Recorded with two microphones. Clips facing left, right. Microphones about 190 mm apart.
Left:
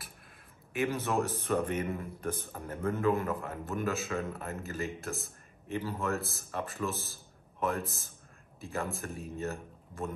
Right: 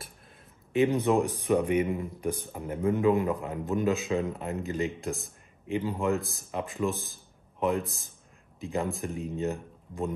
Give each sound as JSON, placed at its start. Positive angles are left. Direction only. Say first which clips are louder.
{"t": 0.7, "sound": "speech", "louder": "right 7 dB", "side_deg": -15}